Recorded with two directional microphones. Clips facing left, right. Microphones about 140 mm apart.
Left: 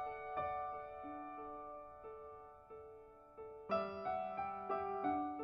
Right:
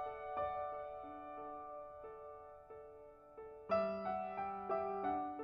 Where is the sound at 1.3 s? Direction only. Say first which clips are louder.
Right 1 dB; centre (ahead or behind).